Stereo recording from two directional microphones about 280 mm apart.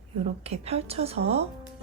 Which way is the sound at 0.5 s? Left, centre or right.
Right.